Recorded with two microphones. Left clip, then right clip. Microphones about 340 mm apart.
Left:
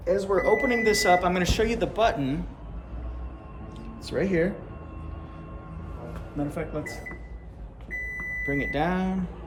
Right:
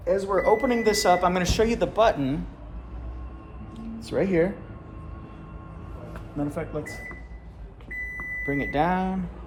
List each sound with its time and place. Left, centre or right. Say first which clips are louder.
0.0 s speech: right 1 dB; centre
3.8 s music: right 2 dB; centre
6.3 s speech: right 1 dB; centre
8.2 s speech: even; centre